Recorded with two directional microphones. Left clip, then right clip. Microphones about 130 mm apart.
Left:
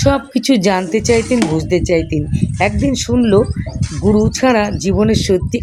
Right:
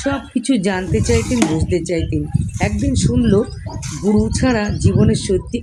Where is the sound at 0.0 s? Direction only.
40° left (ahead or behind).